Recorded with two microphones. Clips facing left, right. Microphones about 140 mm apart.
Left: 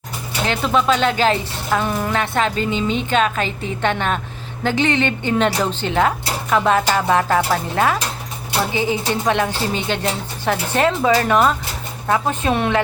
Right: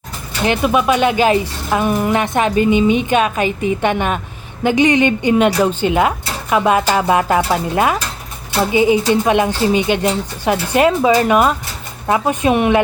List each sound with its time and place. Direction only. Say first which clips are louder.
0.4 s speech: right 3 dB; 15° right (ahead or behind)